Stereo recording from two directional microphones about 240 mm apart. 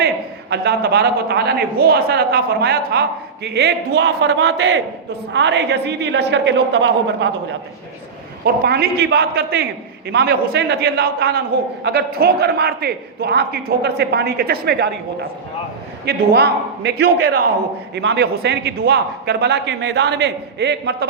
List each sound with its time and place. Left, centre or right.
0.5 s a man's voice: right
8.4 s a man's voice: right
16.0 s a man's voice: right